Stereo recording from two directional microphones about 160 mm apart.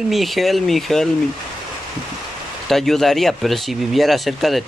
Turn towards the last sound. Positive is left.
turn(degrees=0)  # may be behind; listen again after turning